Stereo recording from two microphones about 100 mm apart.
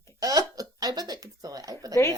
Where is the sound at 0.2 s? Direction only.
35° right (ahead or behind).